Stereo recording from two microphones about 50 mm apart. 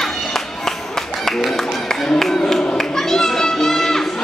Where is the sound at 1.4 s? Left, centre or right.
Centre.